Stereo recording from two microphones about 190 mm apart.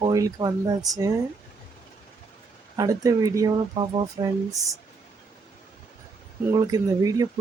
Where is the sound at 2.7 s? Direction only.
20° right (ahead or behind).